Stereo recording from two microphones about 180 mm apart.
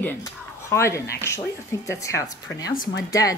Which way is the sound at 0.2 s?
15° left (ahead or behind).